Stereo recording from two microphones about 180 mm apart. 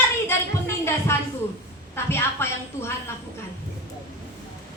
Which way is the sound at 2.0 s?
15° left (ahead or behind).